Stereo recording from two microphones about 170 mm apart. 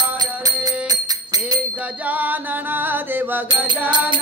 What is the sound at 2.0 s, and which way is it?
Music, 10° right (ahead or behind).